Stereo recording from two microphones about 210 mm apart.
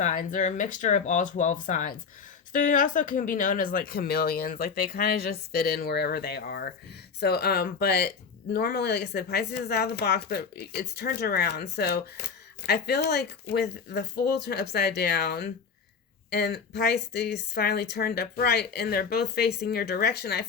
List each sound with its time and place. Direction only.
0.0 s speech: 40° left (ahead or behind)